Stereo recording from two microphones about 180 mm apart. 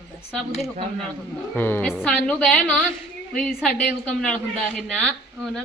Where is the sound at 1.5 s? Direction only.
10° left (ahead or behind).